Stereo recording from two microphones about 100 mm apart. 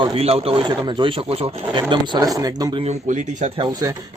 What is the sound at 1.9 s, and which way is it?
Speech, 45° right (ahead or behind).